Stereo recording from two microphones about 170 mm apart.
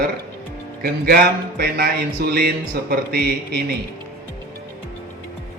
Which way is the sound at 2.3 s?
65° right (ahead or behind).